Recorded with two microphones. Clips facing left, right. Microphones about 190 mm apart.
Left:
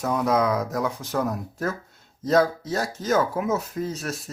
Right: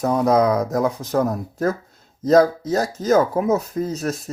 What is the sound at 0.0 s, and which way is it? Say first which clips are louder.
Speech: right 5 dB; 35° right (ahead or behind).